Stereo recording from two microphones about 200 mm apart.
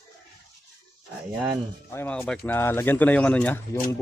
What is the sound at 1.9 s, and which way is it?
Speech, 10° left (ahead or behind).